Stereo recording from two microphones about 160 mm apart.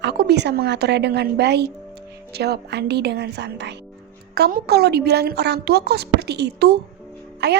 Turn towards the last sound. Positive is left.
turn(degrees=-90)